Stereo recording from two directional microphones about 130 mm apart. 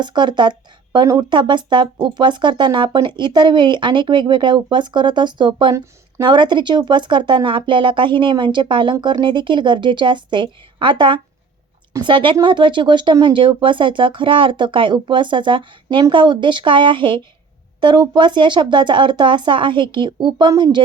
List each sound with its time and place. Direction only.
0.0 s speech: 35° right (ahead or behind)